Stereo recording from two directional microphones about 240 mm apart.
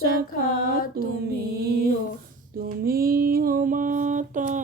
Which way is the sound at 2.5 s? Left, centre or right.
Right.